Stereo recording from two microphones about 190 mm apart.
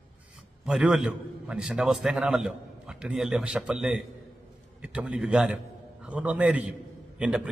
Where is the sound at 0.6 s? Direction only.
5° right (ahead or behind).